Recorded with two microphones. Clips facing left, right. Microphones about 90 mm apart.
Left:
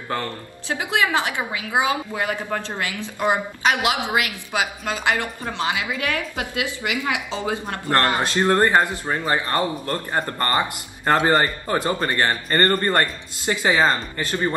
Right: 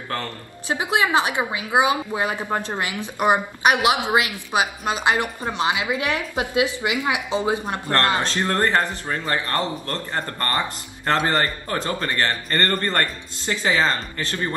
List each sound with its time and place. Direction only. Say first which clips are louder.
0.7 s a woman's voice: right 1 dB; 20° right (ahead or behind)
8.2 s speech: left 3 dB; 15° left (ahead or behind)